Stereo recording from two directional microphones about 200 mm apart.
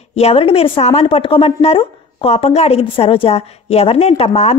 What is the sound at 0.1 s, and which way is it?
Speech, 30° left (ahead or behind).